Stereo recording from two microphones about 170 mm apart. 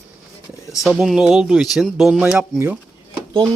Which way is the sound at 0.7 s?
Centre (ahead or behind).